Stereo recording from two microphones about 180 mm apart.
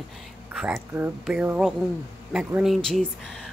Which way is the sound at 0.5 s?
5° right (ahead or behind).